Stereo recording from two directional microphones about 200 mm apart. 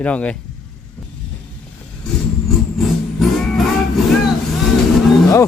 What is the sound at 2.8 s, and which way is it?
Music, centre (ahead or behind).